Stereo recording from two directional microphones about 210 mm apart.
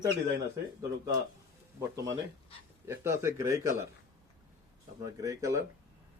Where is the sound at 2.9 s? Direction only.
15° right (ahead or behind).